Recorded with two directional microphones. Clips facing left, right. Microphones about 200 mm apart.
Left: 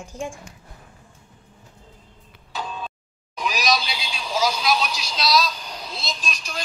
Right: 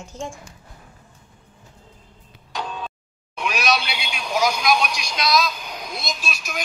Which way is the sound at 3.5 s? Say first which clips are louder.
Right 1 dB; 10° right (ahead or behind).